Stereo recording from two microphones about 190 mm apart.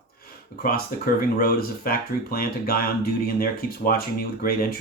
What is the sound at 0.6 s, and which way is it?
Speech, 50° left (ahead or behind).